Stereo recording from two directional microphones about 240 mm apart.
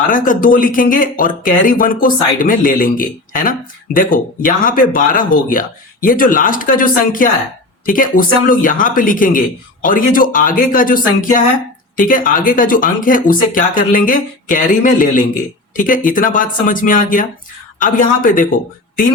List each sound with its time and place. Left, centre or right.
0.1 s speech: left